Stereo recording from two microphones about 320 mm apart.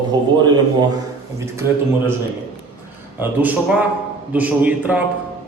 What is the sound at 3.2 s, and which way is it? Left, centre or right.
A man's voice, centre.